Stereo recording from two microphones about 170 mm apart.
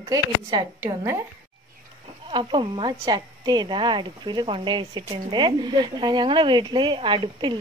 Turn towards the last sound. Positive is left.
turn(degrees=-30)  # may be behind; listen again after turning